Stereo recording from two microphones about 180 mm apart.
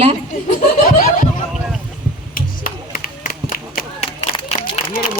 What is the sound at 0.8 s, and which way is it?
Snicker, 50° left (ahead or behind).